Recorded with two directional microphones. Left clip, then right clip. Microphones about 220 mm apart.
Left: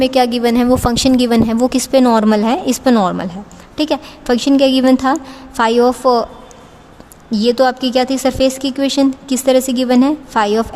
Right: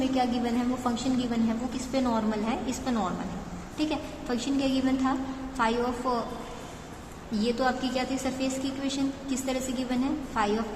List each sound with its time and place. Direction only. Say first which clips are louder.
0.0 s a woman's voice: left 15 dB; 45° left (ahead or behind)
7.3 s a woman's voice: left 15 dB; 50° left (ahead or behind)